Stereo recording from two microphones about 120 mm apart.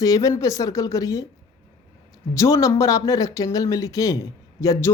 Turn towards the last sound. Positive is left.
turn(degrees=25)  # may be behind; listen again after turning